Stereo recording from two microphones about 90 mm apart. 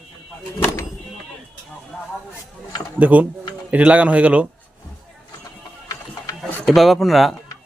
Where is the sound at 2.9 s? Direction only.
20° right (ahead or behind).